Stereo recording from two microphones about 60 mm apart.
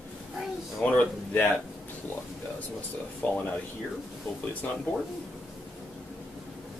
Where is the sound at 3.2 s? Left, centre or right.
Left.